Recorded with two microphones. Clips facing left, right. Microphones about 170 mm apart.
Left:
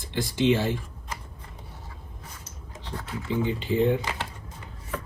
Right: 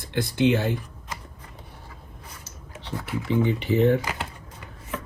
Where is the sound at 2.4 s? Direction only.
70° right (ahead or behind).